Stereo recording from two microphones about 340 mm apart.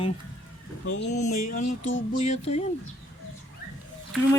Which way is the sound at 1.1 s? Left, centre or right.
Left.